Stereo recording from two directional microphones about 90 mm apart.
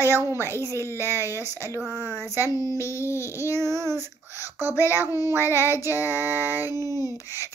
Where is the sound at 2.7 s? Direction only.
30° left (ahead or behind).